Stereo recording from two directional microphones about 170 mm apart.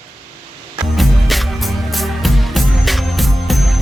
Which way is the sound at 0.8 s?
Centre (ahead or behind).